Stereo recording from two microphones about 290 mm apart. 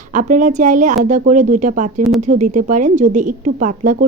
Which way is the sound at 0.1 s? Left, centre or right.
Right.